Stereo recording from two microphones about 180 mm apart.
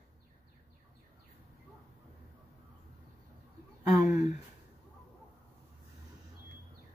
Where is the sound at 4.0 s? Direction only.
20° right (ahead or behind).